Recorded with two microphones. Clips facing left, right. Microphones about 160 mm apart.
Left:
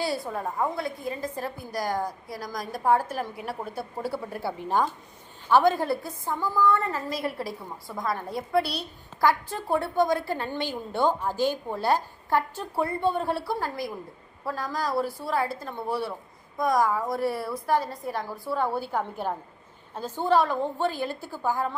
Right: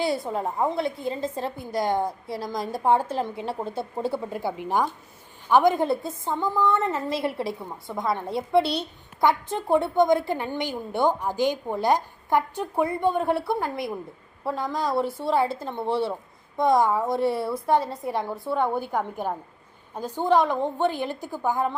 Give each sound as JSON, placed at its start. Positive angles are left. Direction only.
{"t": 0.0, "sound": "a woman's voice", "side_deg": -20}